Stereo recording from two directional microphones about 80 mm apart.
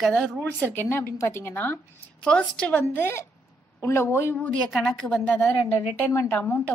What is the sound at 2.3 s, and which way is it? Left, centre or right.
Speech, centre.